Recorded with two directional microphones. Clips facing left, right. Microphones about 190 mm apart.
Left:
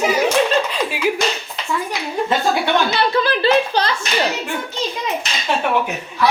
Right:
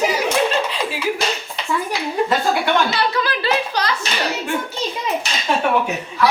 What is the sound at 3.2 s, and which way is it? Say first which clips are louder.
Hands: left 5 dB; 30° left (ahead or behind).